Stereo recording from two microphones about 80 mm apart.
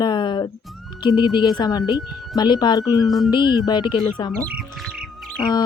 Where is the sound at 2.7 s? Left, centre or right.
Left.